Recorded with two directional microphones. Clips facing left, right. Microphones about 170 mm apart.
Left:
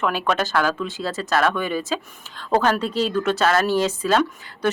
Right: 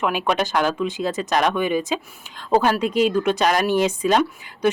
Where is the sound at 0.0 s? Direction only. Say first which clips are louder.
Right 1 dB; 15° right (ahead or behind).